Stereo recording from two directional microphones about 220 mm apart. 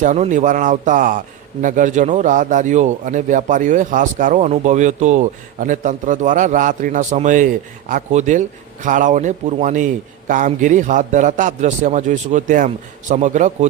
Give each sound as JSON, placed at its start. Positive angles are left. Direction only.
{"t": 0.0, "sound": "speech", "side_deg": -35}